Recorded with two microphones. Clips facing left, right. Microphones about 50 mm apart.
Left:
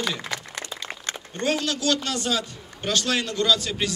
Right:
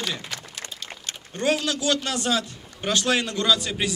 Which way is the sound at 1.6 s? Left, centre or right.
Centre.